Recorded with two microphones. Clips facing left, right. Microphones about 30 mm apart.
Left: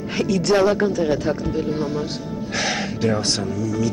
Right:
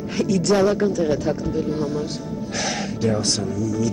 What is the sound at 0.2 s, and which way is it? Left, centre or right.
Speech, left.